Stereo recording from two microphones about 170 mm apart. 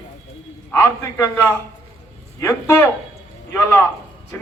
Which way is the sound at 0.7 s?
15° left (ahead or behind).